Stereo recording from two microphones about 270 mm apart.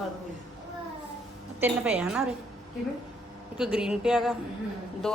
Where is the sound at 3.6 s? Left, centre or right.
Centre.